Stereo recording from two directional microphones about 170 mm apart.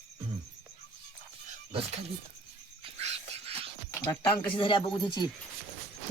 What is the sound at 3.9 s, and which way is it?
Speech, 15° left (ahead or behind).